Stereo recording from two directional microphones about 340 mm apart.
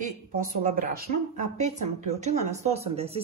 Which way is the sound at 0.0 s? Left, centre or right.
Right.